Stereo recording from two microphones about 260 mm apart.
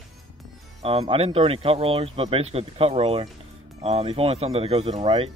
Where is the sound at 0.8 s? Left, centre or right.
Right.